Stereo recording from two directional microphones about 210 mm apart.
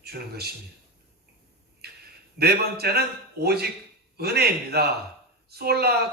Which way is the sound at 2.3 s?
50° right (ahead or behind).